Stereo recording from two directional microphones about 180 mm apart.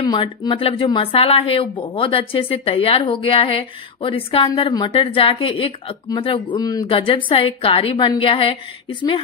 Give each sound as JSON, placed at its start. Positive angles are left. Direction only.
{"t": 0.0, "sound": "speech", "side_deg": 25}